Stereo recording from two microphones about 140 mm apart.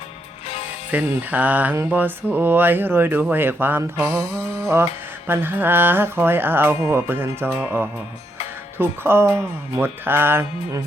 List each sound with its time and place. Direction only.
0.9 s mantra: 10° right (ahead or behind)